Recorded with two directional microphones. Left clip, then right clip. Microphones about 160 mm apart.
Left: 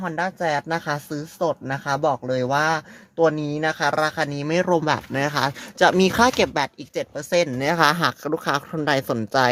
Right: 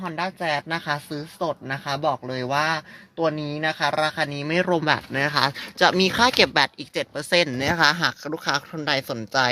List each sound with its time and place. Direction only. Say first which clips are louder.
0.0 s speech: left 3 dB; 25° left (ahead or behind)